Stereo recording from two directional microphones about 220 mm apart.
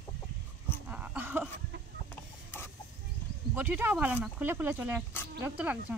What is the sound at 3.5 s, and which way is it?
Speech, 10° right (ahead or behind).